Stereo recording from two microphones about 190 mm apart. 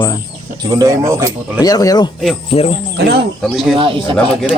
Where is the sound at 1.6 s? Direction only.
20° left (ahead or behind).